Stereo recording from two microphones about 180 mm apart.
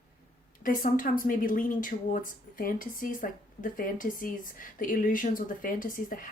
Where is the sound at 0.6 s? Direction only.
50° left (ahead or behind).